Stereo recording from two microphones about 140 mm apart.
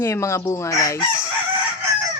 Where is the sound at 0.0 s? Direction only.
20° left (ahead or behind).